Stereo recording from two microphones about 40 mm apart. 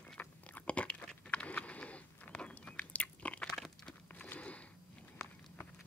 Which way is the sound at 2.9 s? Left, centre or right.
Left.